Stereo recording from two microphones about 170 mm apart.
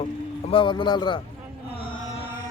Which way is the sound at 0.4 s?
30° left (ahead or behind).